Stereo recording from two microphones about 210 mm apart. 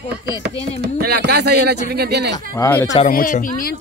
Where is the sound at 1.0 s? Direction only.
50° right (ahead or behind).